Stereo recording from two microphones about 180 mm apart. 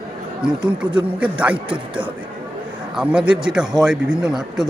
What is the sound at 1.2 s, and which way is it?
A man's voice, 5° right (ahead or behind).